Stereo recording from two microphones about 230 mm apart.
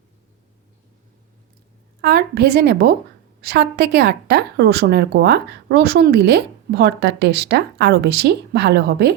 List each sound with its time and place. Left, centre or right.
2.0 s a woman's voice: right